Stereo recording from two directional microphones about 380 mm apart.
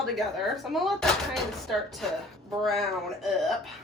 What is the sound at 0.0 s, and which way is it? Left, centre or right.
Speech, centre.